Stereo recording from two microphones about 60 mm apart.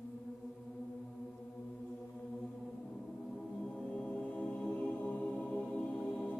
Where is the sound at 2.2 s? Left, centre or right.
Centre.